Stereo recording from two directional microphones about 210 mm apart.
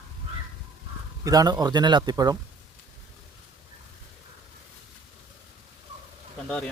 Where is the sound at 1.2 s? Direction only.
20° right (ahead or behind).